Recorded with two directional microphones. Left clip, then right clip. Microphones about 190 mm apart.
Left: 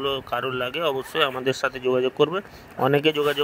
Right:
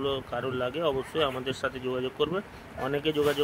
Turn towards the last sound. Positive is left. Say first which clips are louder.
# left 6 dB
turn(degrees=35)  # may be behind; listen again after turning